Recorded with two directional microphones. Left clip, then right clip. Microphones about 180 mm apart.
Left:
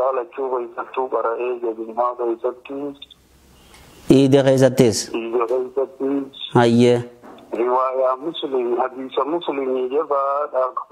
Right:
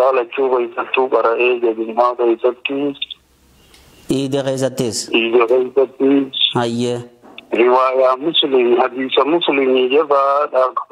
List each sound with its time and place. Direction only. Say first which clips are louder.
0.0 s speech: right 7 dB; 40° right (ahead or behind)
4.1 s a man's voice: left 5 dB; 20° left (ahead or behind)
5.1 s speech: right 8 dB; 40° right (ahead or behind)
6.5 s a man's voice: left 4 dB; 20° left (ahead or behind)
7.5 s speech: right 6 dB; 40° right (ahead or behind)